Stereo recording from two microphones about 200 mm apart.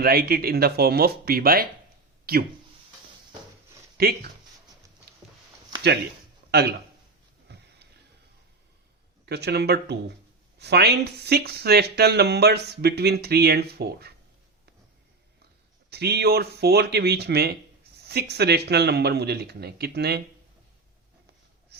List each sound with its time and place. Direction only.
0.0 s speech: 50° right (ahead or behind)
3.9 s speech: 50° right (ahead or behind)
6.5 s speech: 55° right (ahead or behind)
7.4 s a sound: 55° right (ahead or behind)
9.2 s speech: 55° right (ahead or behind)
15.9 s speech: 55° right (ahead or behind)